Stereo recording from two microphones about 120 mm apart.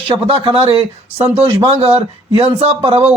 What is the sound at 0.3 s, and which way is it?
Speech, 50° right (ahead or behind).